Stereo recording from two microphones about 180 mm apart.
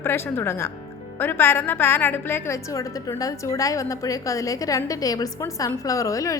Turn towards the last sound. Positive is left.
turn(degrees=20)  # may be behind; listen again after turning